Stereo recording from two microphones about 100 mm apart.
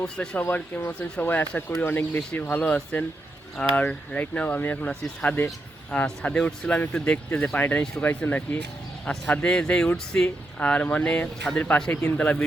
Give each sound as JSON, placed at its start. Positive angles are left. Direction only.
{"t": 0.0, "sound": "speech", "side_deg": 10}